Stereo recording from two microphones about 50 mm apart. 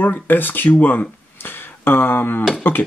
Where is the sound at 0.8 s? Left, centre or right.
Left.